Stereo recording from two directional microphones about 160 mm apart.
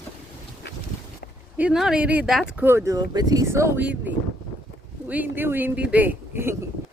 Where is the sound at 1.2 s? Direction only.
75° left (ahead or behind).